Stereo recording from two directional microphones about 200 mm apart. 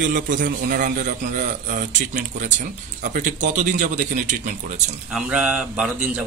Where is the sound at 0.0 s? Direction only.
40° right (ahead or behind).